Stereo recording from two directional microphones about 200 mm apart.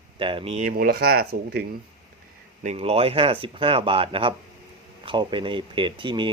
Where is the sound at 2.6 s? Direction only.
30° right (ahead or behind).